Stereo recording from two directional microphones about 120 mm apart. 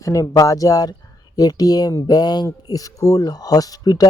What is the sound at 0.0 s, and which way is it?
Speech, 25° left (ahead or behind).